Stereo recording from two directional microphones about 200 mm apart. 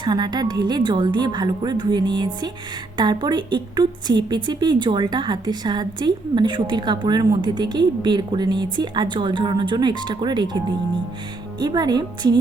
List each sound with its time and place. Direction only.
0.0 s a woman's voice: 20° right (ahead or behind)
11.6 s a woman's voice: 20° right (ahead or behind)